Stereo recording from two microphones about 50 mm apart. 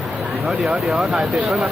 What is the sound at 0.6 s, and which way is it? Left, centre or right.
Speech, centre.